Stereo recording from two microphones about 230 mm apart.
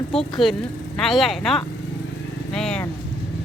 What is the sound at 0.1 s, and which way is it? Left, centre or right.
Speech, centre.